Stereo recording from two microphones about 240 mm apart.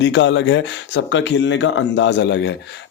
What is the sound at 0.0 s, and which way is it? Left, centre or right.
Speech, left.